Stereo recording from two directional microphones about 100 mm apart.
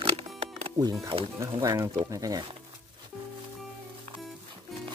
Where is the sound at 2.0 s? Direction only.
40° right (ahead or behind).